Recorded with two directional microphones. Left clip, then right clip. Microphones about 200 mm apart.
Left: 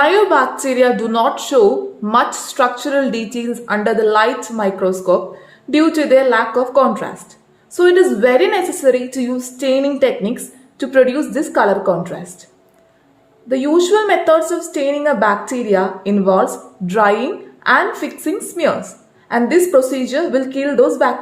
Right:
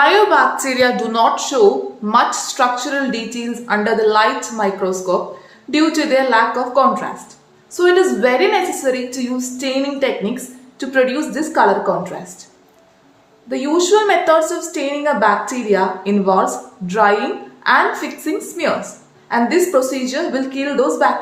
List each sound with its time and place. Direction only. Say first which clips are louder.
0.0 s a woman's voice: right 1 dB; 35° left (ahead or behind)
13.5 s a woman's voice: left 1 dB; 35° left (ahead or behind)